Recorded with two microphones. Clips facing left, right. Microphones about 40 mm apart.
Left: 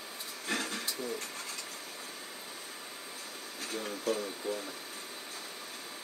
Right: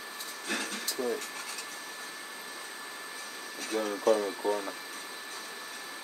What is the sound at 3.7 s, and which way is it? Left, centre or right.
Speech, right.